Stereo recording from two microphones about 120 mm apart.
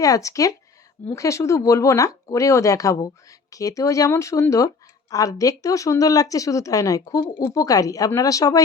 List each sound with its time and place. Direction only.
0.0 s speech: 30° left (ahead or behind)